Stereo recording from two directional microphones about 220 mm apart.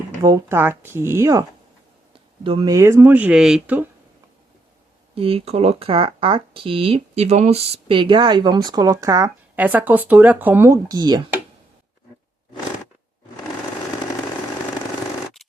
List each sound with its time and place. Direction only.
0.2 s speech: 10° right (ahead or behind)
5.1 s speech: 25° right (ahead or behind)